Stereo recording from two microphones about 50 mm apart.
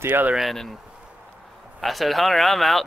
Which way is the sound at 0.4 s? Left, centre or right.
Centre.